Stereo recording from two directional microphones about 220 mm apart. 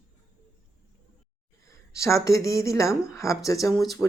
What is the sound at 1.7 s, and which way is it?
A woman's voice, 15° left (ahead or behind).